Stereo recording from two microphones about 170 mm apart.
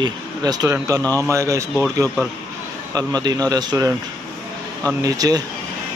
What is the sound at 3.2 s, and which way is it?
Speech, 25° right (ahead or behind).